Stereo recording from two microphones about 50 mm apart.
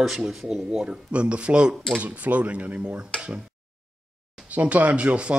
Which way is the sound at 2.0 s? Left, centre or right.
Right.